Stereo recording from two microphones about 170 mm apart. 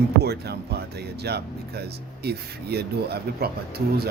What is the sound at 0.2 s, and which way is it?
Speech, 70° right (ahead or behind).